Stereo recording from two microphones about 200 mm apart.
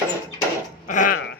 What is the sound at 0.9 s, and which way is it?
Dog, 40° left (ahead or behind).